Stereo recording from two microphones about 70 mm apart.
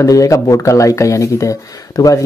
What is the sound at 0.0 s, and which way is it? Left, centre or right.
Speech, left.